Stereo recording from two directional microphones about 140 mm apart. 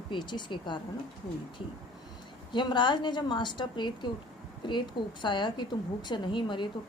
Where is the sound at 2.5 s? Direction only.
35° left (ahead or behind).